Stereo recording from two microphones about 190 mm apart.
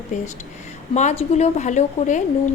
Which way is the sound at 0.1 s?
40° left (ahead or behind).